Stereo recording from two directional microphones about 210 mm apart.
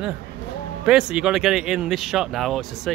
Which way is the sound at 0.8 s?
5° right (ahead or behind).